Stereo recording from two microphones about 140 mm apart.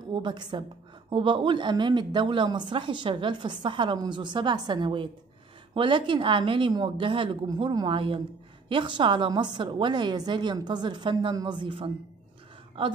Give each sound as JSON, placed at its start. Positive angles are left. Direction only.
{"t": 0.1, "sound": "a woman's voice", "side_deg": -35}